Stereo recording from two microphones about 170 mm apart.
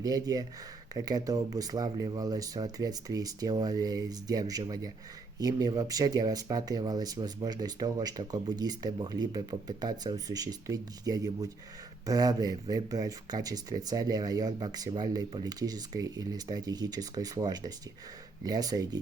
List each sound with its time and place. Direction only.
0.0 s speech: 20° right (ahead or behind)